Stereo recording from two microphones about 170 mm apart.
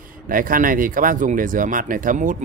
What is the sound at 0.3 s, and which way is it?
Speech, 55° right (ahead or behind).